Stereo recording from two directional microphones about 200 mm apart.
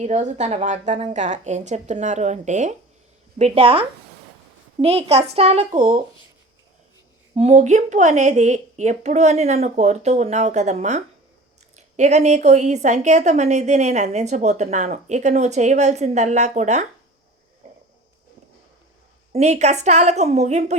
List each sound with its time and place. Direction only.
0.0 s a woman's voice: 35° right (ahead or behind)
7.3 s a woman's voice: 35° right (ahead or behind)
17.6 s a sound: 35° right (ahead or behind)
19.3 s a woman's voice: 35° right (ahead or behind)